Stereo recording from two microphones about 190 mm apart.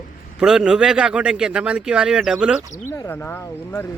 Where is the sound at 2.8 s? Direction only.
15° left (ahead or behind).